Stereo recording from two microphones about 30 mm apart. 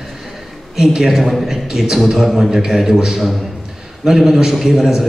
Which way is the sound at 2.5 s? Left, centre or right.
Right.